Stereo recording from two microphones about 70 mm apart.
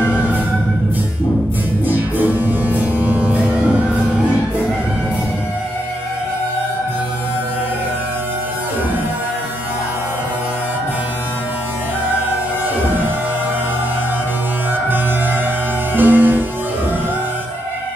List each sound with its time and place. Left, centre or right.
0.0 s music: right
1.9 s music: right
16.0 s music: right